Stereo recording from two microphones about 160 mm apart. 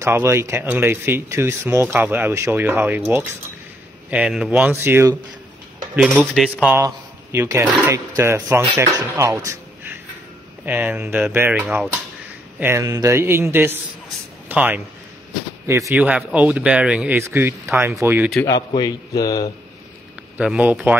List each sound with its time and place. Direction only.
0.0 s speech: 15° right (ahead or behind)
6.3 s speech: centre (ahead or behind)
7.3 s speech: 15° right (ahead or behind)
18.7 s speech: 25° left (ahead or behind)
20.3 s speech: 5° right (ahead or behind)